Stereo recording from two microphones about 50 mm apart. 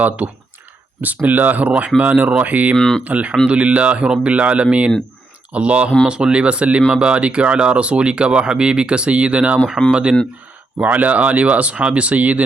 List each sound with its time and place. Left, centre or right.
1.0 s speech: right
2.7 s speech: centre
3.0 s speech: right
10.8 s speech: right